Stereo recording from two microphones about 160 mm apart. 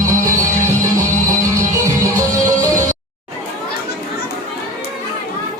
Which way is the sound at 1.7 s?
20° right (ahead or behind).